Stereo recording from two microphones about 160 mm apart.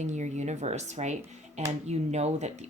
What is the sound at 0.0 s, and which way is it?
Speech, 45° right (ahead or behind).